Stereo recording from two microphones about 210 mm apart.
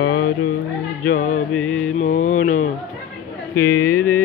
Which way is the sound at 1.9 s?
35° left (ahead or behind).